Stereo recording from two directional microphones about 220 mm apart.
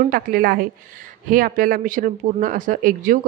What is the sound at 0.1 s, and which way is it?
A woman's voice, 40° right (ahead or behind).